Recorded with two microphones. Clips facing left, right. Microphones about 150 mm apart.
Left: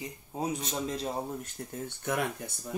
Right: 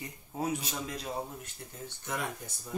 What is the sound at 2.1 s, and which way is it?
Speech, 60° left (ahead or behind).